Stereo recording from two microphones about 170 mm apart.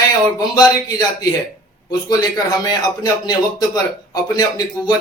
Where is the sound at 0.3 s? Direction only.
20° left (ahead or behind).